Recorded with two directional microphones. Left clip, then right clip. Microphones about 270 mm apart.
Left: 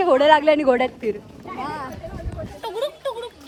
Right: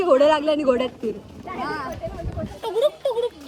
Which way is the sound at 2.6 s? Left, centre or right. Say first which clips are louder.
Right 5 dB; left.